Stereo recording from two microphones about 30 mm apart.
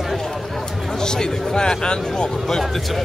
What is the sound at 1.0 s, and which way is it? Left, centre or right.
Speech, left.